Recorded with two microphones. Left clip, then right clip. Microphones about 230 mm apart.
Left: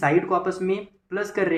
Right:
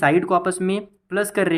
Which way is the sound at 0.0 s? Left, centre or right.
Right.